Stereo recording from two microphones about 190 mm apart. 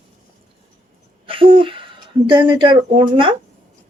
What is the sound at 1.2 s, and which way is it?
Speech, 30° right (ahead or behind).